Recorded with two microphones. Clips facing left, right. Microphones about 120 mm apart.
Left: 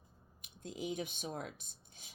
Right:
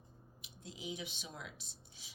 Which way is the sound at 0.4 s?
50° left (ahead or behind).